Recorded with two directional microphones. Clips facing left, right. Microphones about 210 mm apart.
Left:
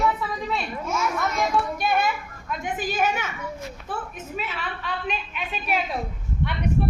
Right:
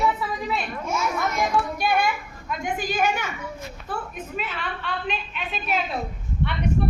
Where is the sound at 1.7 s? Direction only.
Centre (ahead or behind).